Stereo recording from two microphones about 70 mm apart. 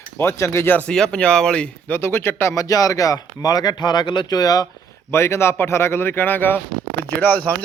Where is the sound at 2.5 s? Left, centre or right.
Left.